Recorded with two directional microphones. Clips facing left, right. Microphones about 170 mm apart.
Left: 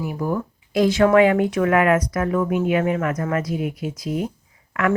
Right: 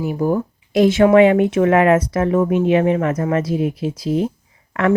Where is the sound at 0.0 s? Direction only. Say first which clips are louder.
Right 5 dB; 25° right (ahead or behind).